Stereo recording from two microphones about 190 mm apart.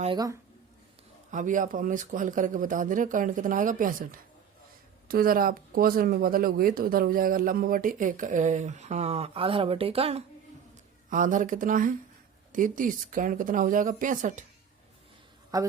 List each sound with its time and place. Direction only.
1.3 s speech: 40° right (ahead or behind)
11.1 s speech: 40° right (ahead or behind)
15.5 s a woman's voice: 20° right (ahead or behind)